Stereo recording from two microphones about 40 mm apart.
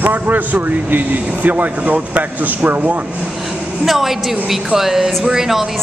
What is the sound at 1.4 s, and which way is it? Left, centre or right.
Speech, right.